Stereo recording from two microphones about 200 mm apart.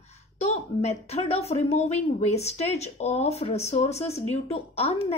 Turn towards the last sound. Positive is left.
turn(degrees=30)  # may be behind; listen again after turning